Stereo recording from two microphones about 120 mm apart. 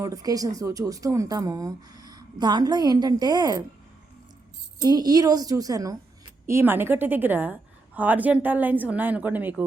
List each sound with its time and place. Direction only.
0.0 s a woman's voice: 30° right (ahead or behind)
4.8 s a woman's voice: 30° right (ahead or behind); by 9.6 s 15° right (ahead or behind)